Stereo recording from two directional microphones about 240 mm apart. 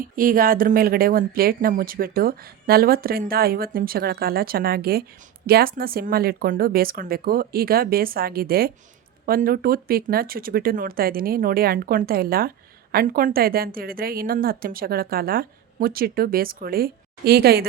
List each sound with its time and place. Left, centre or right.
0.0 s speech: right